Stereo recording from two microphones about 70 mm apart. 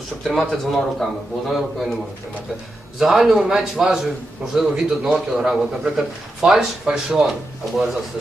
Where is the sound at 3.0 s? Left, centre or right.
Centre.